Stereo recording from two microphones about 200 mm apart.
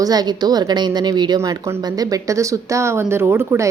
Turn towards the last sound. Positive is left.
turn(degrees=-15)  # may be behind; listen again after turning